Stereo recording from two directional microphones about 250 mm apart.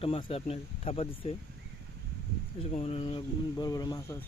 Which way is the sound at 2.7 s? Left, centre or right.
Left.